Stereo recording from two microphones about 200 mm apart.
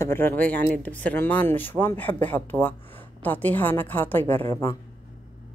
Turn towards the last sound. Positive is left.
turn(degrees=15)  # may be behind; listen again after turning